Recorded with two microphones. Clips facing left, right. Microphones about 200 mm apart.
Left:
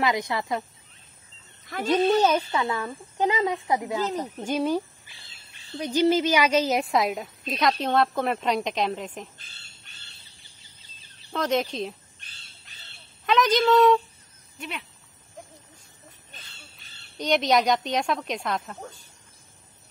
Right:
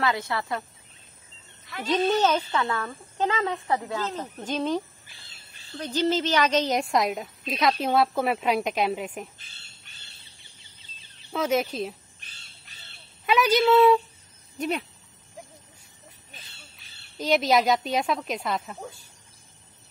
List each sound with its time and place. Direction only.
0.0 s speech: 15° left (ahead or behind)
1.9 s a woman's voice: 10° left (ahead or behind); by 9.3 s 10° right (ahead or behind)
11.3 s crow: 5° right (ahead or behind)
14.6 s speech: 40° right (ahead or behind)
17.2 s a woman's voice: 5° right (ahead or behind)